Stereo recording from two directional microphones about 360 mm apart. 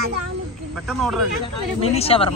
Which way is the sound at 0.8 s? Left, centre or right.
Centre.